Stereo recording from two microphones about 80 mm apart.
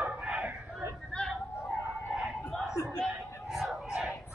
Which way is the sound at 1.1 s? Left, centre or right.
Centre.